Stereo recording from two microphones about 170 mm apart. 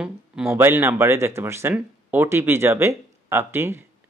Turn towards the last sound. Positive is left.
turn(degrees=-15)  # may be behind; listen again after turning